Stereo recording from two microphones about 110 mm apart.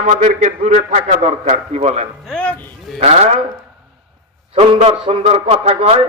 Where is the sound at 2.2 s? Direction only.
10° left (ahead or behind).